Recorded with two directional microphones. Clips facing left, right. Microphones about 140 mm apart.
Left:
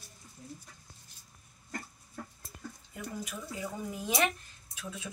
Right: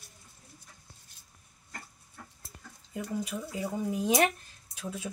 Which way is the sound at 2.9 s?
25° right (ahead or behind).